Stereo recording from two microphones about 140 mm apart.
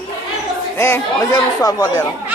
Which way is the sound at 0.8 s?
20° left (ahead or behind).